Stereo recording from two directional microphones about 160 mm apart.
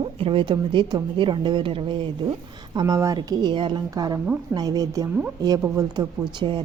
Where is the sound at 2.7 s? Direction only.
20° right (ahead or behind).